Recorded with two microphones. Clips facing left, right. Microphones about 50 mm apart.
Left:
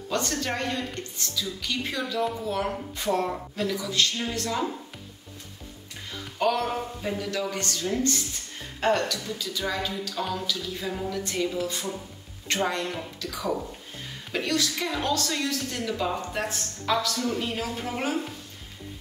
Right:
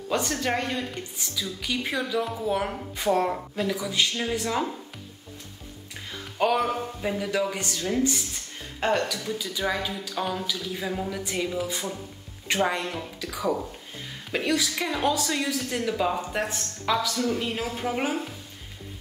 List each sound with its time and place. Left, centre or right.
0.1 s a woman's voice: centre
6.3 s a woman's voice: centre
9.2 s a woman's voice: centre